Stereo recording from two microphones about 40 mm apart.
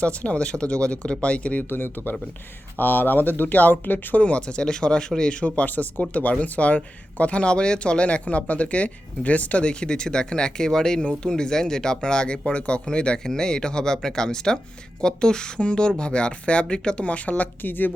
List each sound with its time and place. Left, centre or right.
0.0 s speech: left
1.7 s speech: left
4.2 s speech: left
5.4 s speech: left